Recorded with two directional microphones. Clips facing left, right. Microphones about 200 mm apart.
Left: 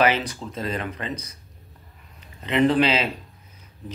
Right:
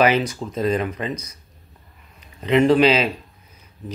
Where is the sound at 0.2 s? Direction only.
30° left (ahead or behind).